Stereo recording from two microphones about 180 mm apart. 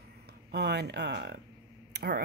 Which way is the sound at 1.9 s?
65° right (ahead or behind).